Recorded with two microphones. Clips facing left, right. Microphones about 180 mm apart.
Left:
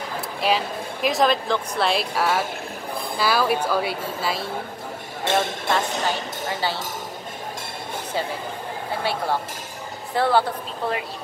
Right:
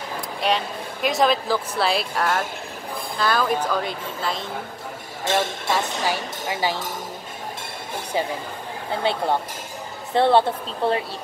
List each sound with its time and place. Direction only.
0.4 s speech: 5° left (ahead or behind)
5.3 s speech: 5° right (ahead or behind)
9.1 s speech: 20° right (ahead or behind)